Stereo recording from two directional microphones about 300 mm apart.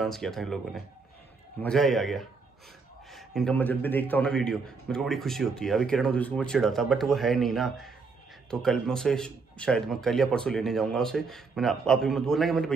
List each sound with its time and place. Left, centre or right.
0.0 s a man's voice: centre